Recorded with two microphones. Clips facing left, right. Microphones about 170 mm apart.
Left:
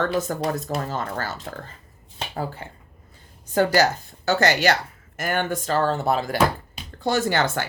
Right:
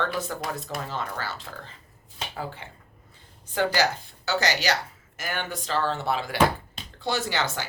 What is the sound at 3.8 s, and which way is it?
Speech, 45° left (ahead or behind).